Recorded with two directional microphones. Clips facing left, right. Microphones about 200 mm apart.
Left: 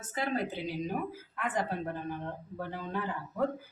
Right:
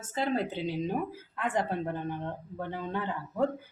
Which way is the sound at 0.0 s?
25° right (ahead or behind).